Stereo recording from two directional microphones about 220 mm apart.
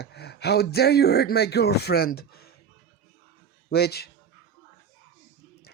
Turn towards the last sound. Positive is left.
turn(degrees=45)  # may be behind; listen again after turning